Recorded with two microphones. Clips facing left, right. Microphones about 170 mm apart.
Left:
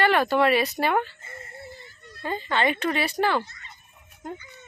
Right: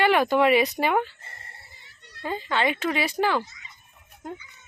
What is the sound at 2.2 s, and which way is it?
Speech, 10° right (ahead or behind).